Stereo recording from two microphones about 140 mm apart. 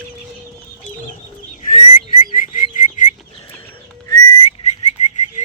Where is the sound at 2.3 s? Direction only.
70° left (ahead or behind).